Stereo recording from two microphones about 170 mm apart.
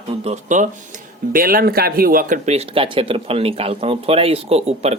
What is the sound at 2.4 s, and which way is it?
Speech, 35° right (ahead or behind).